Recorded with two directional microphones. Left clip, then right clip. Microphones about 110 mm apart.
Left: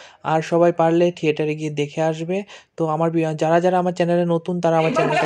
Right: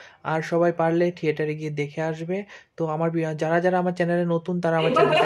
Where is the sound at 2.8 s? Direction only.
40° left (ahead or behind).